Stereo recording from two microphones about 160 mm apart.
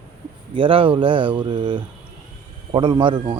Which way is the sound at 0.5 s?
35° right (ahead or behind).